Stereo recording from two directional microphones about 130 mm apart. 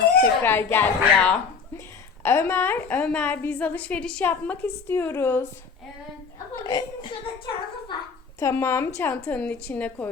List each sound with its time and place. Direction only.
0.4 s a woman's voice: 15° left (ahead or behind)
6.6 s a woman's voice: 25° left (ahead or behind)
7.0 s a woman's voice: 40° left (ahead or behind)
8.4 s a woman's voice: 20° left (ahead or behind)